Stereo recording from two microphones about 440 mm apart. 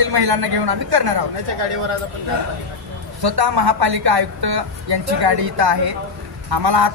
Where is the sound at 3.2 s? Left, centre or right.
Right.